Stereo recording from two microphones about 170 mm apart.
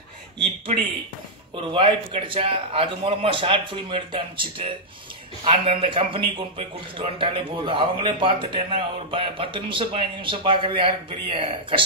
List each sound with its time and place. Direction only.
1.5 s a man's voice: 30° right (ahead or behind)